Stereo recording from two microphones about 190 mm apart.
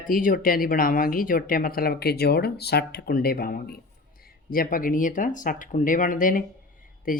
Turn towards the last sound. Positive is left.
turn(degrees=45)  # may be behind; listen again after turning